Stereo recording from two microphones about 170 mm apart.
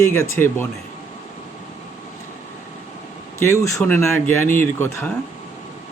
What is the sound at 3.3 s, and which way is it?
Speech, 15° left (ahead or behind).